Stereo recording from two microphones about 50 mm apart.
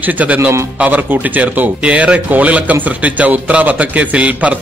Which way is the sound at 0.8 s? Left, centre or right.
Right.